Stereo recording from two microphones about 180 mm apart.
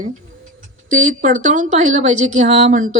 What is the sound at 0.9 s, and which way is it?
A woman's voice, 45° right (ahead or behind).